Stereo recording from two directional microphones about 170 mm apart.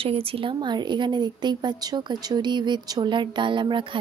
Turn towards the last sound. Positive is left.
turn(degrees=-30)  # may be behind; listen again after turning